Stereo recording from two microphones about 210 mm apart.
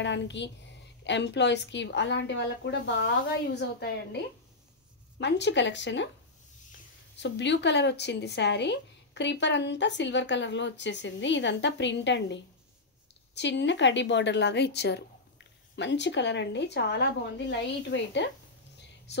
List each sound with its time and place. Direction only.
0.0 s a woman's voice: 60° left (ahead or behind)
5.2 s speech: 55° left (ahead or behind)
7.2 s speech: 55° left (ahead or behind)